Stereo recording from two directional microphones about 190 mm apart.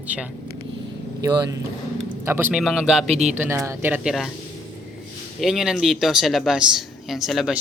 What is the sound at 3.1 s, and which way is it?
Speech, 35° right (ahead or behind).